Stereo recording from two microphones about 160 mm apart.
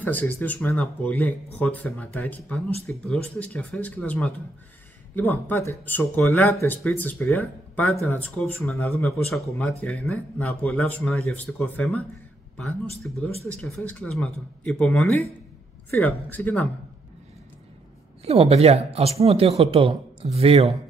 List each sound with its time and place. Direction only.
0.0 s speech: 10° left (ahead or behind)
13.0 s speech: 10° left (ahead or behind)
18.2 s speech: 40° right (ahead or behind)